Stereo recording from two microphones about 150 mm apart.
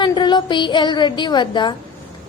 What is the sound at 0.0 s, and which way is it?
A woman's voice, 30° left (ahead or behind).